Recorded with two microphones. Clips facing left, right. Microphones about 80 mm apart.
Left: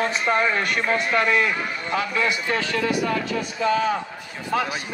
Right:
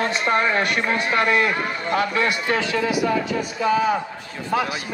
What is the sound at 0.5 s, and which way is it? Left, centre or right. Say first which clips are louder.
A man's voice: right 1 dB; right.